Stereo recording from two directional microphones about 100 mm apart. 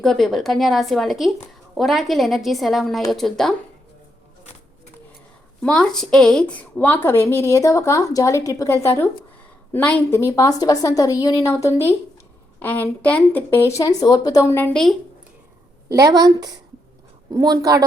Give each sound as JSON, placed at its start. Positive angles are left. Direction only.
{"t": 0.0, "sound": "a woman's voice", "side_deg": 5}
{"t": 5.6, "sound": "a woman's voice", "side_deg": 5}
{"t": 9.7, "sound": "a woman's voice", "side_deg": 15}
{"t": 10.1, "sound": "a woman's voice", "side_deg": 30}
{"t": 14.4, "sound": "a woman's voice", "side_deg": 25}
{"t": 14.7, "sound": "a woman's voice", "side_deg": 5}
{"t": 15.9, "sound": "a woman's voice", "side_deg": -40}